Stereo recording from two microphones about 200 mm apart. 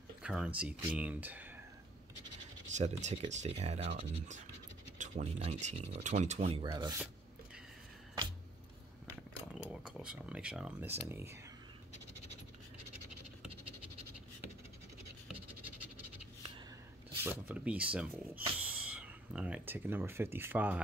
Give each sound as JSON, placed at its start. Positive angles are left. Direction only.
{"t": 0.2, "sound": "speech", "side_deg": -5}
{"t": 2.7, "sound": "speech", "side_deg": -35}
{"t": 4.9, "sound": "speech", "side_deg": -40}
{"t": 6.6, "sound": "speech", "side_deg": -25}
{"t": 9.5, "sound": "a sound", "side_deg": -5}
{"t": 11.1, "sound": "speech", "side_deg": -10}
{"t": 17.2, "sound": "speech", "side_deg": -10}